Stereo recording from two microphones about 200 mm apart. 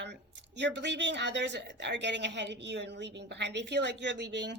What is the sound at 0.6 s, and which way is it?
A woman's voice, 60° right (ahead or behind).